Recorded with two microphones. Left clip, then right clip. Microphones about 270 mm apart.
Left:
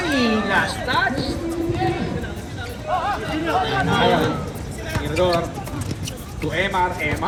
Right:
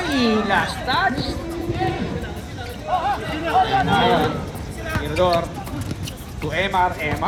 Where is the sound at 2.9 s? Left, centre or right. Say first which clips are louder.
Right 1 dB; right.